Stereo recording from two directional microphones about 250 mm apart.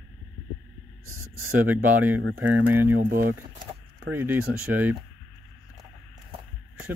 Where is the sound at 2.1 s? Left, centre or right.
Right.